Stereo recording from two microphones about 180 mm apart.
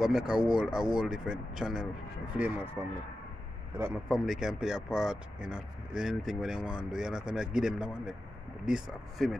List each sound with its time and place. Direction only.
0.0 s speech: 5° right (ahead or behind)
3.7 s speech: 10° right (ahead or behind)